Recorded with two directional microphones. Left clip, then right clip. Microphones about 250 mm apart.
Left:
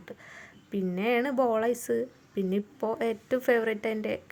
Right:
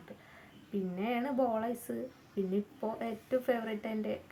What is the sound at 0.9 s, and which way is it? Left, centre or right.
A woman's voice, left.